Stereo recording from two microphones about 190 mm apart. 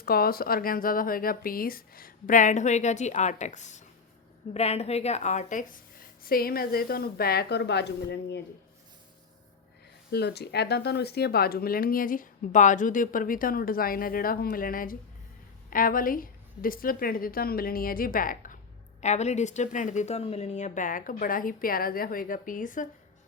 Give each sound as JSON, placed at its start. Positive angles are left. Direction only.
{"t": 0.0, "sound": "a woman's voice", "side_deg": 55}
{"t": 10.1, "sound": "speech", "side_deg": 60}